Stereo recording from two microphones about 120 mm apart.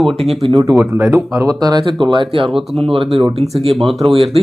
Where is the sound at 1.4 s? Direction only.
35° right (ahead or behind); by 3.9 s 50° right (ahead or behind).